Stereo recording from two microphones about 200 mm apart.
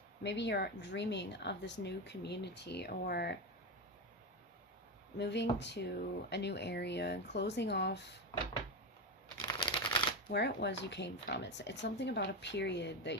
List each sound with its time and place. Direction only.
0.2 s speech: 60° left (ahead or behind)
5.1 s speech: 60° left (ahead or behind)
9.4 s a sound: 15° left (ahead or behind)
10.3 s speech: 60° left (ahead or behind)